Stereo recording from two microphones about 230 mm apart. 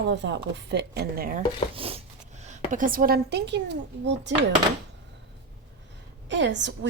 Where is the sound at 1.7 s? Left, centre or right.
Right.